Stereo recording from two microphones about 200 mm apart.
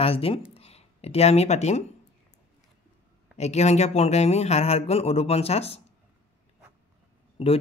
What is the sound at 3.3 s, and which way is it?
Speech, 35° left (ahead or behind).